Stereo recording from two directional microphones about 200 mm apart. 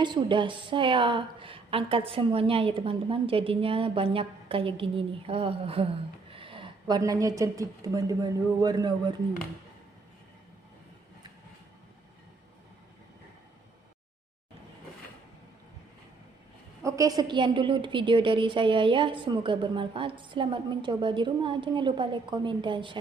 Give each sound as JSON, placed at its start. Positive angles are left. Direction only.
{"t": 0.0, "sound": "a woman's voice", "side_deg": -25}
{"t": 16.8, "sound": "a woman's voice", "side_deg": -15}